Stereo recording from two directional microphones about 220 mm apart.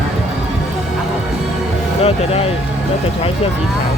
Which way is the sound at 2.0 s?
25° left (ahead or behind).